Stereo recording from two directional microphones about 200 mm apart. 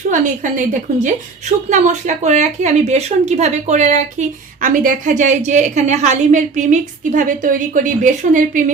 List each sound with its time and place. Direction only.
0.1 s a woman's voice: 40° right (ahead or behind)